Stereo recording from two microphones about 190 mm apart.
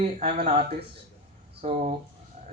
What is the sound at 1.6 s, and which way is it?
Speech, 35° right (ahead or behind).